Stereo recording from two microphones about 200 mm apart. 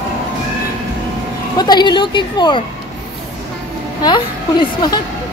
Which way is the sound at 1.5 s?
20° left (ahead or behind).